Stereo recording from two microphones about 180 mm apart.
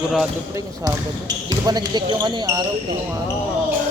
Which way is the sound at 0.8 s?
20° right (ahead or behind).